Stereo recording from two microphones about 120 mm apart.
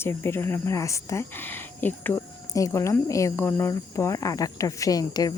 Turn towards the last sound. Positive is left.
turn(degrees=35)  # may be behind; listen again after turning